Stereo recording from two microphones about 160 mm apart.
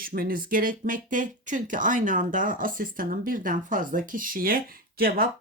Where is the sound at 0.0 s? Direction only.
65° right (ahead or behind).